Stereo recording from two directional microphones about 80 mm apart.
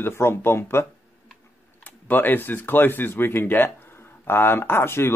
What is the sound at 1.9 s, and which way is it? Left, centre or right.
A man's voice, left.